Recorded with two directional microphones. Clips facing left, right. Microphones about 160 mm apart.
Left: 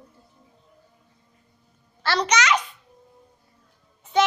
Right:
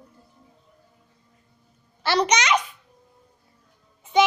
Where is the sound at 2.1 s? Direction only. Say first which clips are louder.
Right 1 dB; 15° right (ahead or behind).